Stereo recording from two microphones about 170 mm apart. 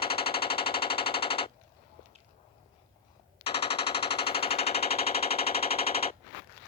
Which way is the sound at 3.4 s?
35° left (ahead or behind).